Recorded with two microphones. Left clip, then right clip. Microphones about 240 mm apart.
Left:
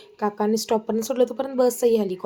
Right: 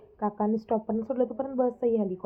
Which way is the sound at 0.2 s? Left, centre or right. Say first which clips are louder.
Left 6 dB; centre.